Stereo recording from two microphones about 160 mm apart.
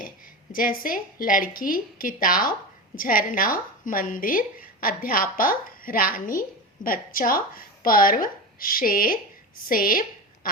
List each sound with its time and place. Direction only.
0.5 s a woman's voice: 60° left (ahead or behind)
10.4 s duck: 65° left (ahead or behind)